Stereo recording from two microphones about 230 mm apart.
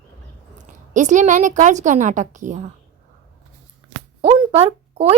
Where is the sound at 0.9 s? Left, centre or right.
Right.